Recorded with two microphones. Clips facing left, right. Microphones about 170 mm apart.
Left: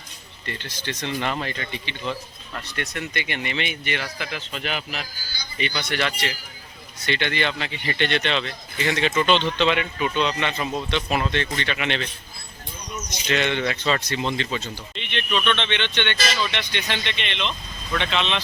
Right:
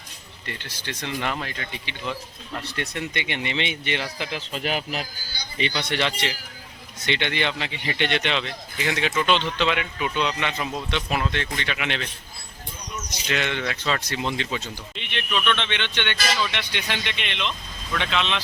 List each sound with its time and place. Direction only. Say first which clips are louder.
0.4 s speech: left 3 dB; 10° right (ahead or behind)
2.6 s speech: even; 30° right (ahead or behind)
5.5 s speech: right 1 dB; 30° right (ahead or behind); by 12.0 s 5° right (ahead or behind)
13.1 s speech: left 4 dB; 5° right (ahead or behind)